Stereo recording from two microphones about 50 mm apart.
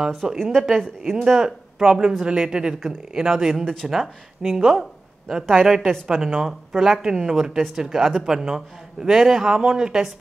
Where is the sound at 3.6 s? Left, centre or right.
Centre.